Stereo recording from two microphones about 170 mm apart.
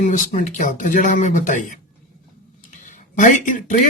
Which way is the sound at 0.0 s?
50° left (ahead or behind).